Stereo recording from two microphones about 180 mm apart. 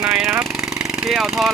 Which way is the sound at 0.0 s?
5° right (ahead or behind).